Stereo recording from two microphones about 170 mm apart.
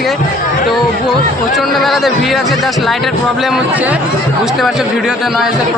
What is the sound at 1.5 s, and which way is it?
Speech, centre (ahead or behind).